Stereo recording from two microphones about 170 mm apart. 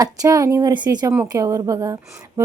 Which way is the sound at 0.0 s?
20° right (ahead or behind).